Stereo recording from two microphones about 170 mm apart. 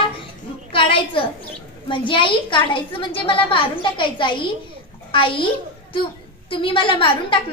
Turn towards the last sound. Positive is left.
turn(degrees=30)  # may be behind; listen again after turning